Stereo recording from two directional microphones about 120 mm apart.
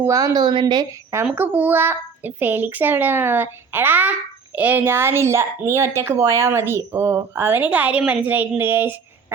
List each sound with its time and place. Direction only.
0.0 s a woman's voice: 25° right (ahead or behind)
1.2 s a child's voice: 15° right (ahead or behind)